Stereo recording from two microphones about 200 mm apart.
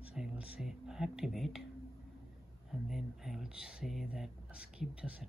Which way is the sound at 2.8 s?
Centre (ahead or behind).